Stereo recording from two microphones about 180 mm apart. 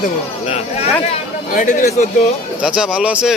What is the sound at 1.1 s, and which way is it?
Speech, 45° left (ahead or behind).